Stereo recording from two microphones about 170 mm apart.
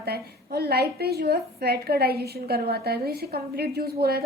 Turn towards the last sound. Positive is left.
turn(degrees=-65)  # may be behind; listen again after turning